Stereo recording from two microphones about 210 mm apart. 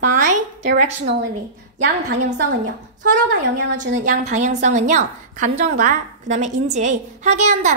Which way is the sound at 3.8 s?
35° right (ahead or behind).